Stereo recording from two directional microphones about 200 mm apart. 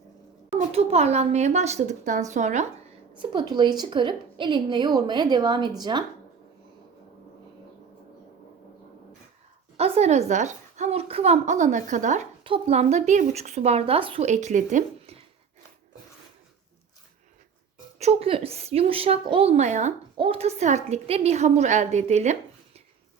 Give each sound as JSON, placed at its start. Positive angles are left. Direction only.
{"t": 0.7, "sound": "a woman's voice", "side_deg": -30}
{"t": 3.2, "sound": "a woman's voice", "side_deg": -20}
{"t": 9.7, "sound": "a woman's voice", "side_deg": -30}
{"t": 18.0, "sound": "a woman's voice", "side_deg": -30}